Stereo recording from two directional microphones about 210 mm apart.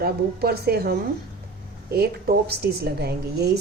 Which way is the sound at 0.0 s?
50° right (ahead or behind).